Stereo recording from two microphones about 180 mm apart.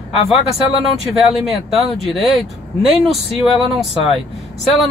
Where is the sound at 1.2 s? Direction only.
Centre (ahead or behind).